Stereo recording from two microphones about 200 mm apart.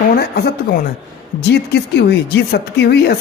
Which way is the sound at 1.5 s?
55° left (ahead or behind).